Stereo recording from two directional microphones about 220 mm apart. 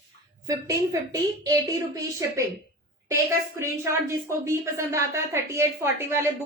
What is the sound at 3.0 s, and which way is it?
A woman's voice, 15° right (ahead or behind).